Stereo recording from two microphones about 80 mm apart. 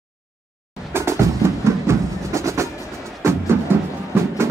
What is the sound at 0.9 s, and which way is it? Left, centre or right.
Music, right.